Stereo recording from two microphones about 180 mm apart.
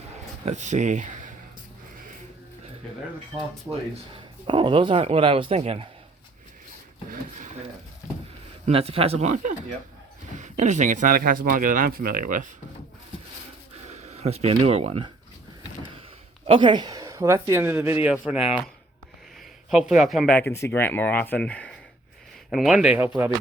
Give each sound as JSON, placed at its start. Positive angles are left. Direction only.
{"t": 0.4, "sound": "a man's voice", "side_deg": -40}
{"t": 3.7, "sound": "speech", "side_deg": -15}
{"t": 4.4, "sound": "a man's voice", "side_deg": -25}
{"t": 8.6, "sound": "a man's voice", "side_deg": -35}
{"t": 13.9, "sound": "speech", "side_deg": -40}
{"t": 16.5, "sound": "speech", "side_deg": -25}
{"t": 19.7, "sound": "speech", "side_deg": -5}